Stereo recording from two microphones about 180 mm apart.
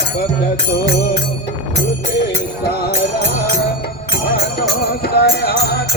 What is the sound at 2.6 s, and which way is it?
Music, 60° left (ahead or behind).